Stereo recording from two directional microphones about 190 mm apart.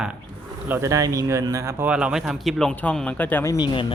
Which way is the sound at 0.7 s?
15° right (ahead or behind).